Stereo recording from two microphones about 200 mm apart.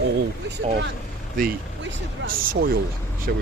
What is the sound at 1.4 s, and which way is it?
Speech, 45° right (ahead or behind).